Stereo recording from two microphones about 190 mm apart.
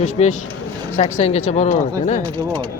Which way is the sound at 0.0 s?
35° left (ahead or behind).